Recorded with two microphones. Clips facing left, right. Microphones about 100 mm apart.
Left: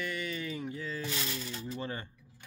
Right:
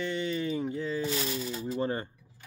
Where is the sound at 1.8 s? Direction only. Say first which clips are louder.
Right 10 dB; 35° right (ahead or behind).